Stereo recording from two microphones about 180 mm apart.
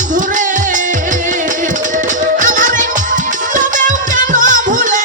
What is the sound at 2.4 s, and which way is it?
Music, 45° right (ahead or behind).